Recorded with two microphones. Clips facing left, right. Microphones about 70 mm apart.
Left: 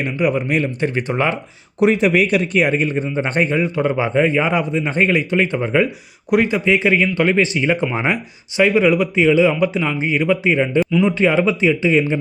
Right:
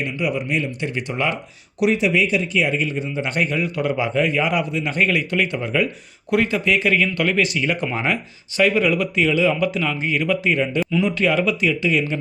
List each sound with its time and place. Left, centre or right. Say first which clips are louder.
0.0 s speech: left 5 dB; left